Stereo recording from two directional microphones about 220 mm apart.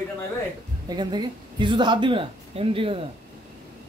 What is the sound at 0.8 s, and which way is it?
A man's voice, 20° right (ahead or behind).